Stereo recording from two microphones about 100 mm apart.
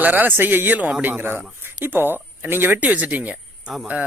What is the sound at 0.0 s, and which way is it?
A man's voice, 15° right (ahead or behind).